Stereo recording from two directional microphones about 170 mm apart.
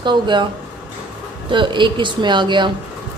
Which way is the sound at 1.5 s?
30° right (ahead or behind).